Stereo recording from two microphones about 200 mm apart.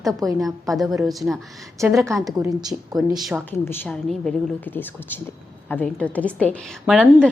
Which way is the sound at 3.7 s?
5° left (ahead or behind).